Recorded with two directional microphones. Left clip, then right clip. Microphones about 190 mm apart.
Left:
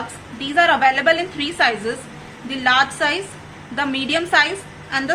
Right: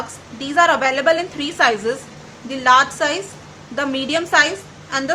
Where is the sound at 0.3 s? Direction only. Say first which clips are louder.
Right 1 dB; 25° right (ahead or behind).